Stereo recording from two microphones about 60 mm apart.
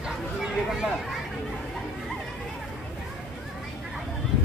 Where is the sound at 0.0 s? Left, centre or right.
Centre.